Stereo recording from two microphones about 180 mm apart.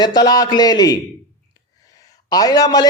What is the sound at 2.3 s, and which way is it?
Speech, 20° left (ahead or behind).